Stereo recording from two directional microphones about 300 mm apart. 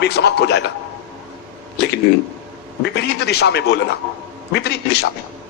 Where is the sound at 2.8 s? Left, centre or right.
Left.